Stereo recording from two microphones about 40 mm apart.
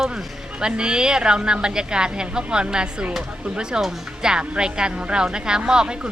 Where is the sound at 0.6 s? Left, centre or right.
Right.